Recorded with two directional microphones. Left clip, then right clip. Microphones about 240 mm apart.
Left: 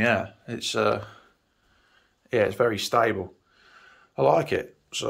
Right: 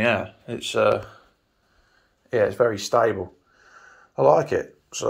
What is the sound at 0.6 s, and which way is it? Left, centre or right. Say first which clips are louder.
Speech: right 4 dB; left.